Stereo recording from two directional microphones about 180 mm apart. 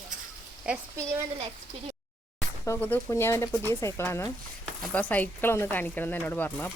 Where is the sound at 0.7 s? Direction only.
5° right (ahead or behind).